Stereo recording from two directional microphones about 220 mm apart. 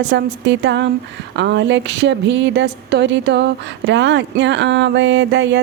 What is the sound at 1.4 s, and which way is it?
A woman's voice, 50° right (ahead or behind).